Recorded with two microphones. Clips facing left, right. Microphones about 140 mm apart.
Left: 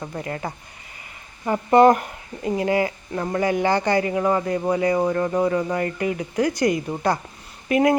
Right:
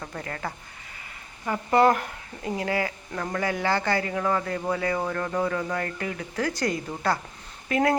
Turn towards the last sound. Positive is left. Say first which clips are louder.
# left 5 dB
turn(degrees=15)  # may be behind; listen again after turning